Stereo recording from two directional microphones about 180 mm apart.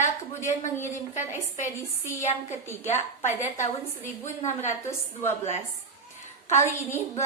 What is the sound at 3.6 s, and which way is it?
A woman's voice, 15° left (ahead or behind).